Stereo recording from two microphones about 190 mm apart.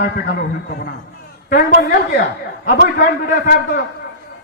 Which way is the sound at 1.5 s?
50° left (ahead or behind).